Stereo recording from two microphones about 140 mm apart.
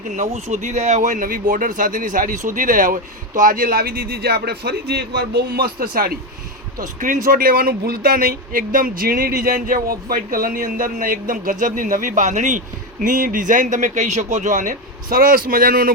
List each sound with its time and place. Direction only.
0.1 s speech: 55° right (ahead or behind); by 4.4 s 90° right
5.5 s speech: 90° right
6.7 s speech: 75° right (ahead or behind); by 15.9 s 90° right